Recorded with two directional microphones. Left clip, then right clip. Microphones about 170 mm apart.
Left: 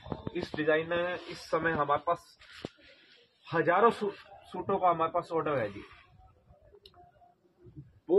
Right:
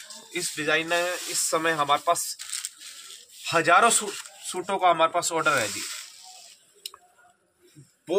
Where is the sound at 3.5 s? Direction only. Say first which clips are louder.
Right 6 dB; 45° right (ahead or behind).